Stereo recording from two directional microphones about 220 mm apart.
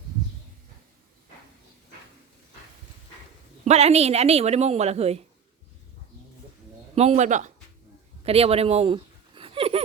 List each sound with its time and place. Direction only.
3.7 s speech: 30° right (ahead or behind)
6.9 s speech: 30° right (ahead or behind)
8.2 s a sound: 25° right (ahead or behind)